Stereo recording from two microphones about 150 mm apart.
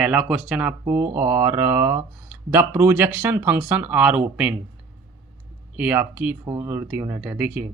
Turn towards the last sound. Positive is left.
turn(degrees=-10)  # may be behind; listen again after turning